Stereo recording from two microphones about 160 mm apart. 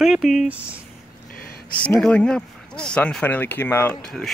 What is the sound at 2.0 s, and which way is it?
Speech, 5° left (ahead or behind).